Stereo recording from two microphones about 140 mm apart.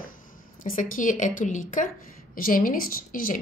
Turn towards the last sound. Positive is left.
turn(degrees=85)